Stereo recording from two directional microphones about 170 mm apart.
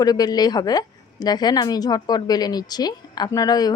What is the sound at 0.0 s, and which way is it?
A woman's voice, 20° left (ahead or behind).